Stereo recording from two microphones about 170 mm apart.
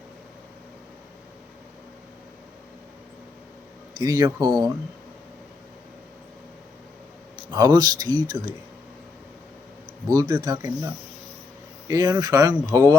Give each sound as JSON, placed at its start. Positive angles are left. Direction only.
{"t": 4.0, "sound": "speech", "side_deg": -20}
{"t": 7.5, "sound": "speech", "side_deg": -25}
{"t": 10.1, "sound": "speech", "side_deg": -20}
{"t": 11.9, "sound": "speech", "side_deg": -20}